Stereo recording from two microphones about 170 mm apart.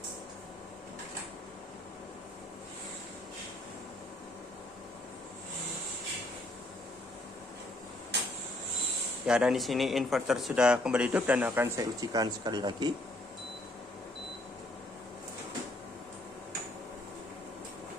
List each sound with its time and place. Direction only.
9.2 s speech: 5° right (ahead or behind); by 12.9 s 25° right (ahead or behind)